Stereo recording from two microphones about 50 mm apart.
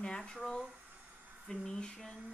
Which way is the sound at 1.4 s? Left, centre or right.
Centre.